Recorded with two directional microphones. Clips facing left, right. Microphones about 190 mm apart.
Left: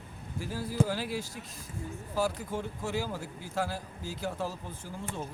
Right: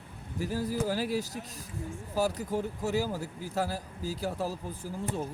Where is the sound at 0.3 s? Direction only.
40° right (ahead or behind).